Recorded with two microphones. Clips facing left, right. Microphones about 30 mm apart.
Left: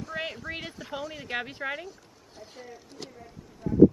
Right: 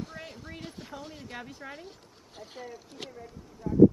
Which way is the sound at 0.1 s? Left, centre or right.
Left.